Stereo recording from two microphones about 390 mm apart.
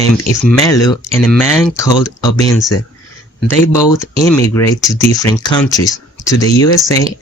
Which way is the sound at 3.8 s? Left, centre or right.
Centre.